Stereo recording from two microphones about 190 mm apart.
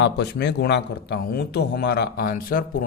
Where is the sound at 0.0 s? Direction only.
65° left (ahead or behind).